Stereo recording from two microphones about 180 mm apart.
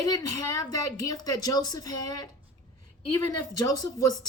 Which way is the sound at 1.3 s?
20° left (ahead or behind).